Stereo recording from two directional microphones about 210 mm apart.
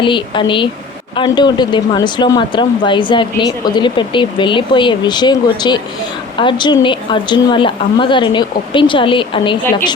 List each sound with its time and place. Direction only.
0.0 s speech: 25° left (ahead or behind)